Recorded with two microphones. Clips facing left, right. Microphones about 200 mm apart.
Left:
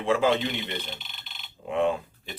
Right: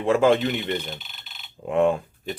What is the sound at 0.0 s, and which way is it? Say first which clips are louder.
Speech: right 5 dB; 50° right (ahead or behind).